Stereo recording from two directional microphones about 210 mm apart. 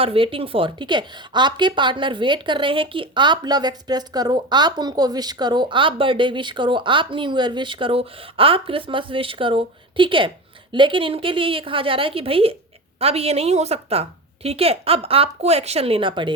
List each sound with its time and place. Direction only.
0.0 s a woman's voice: 25° right (ahead or behind)